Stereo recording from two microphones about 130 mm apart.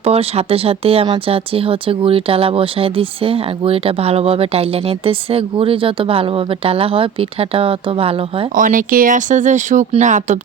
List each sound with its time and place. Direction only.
0.0 s speech: 50° right (ahead or behind)
8.5 s speech: 90° right; by 10.3 s 65° right (ahead or behind)